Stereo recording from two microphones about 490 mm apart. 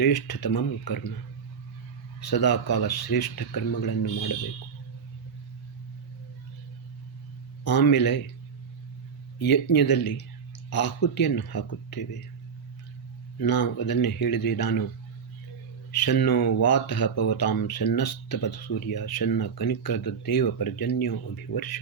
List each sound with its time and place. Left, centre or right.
0.0 s speech: left
2.2 s speech: left
7.6 s speech: left
9.4 s speech: left
13.4 s speech: left
15.9 s speech: left